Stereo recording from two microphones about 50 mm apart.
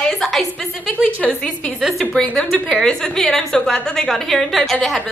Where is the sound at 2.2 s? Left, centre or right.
Centre.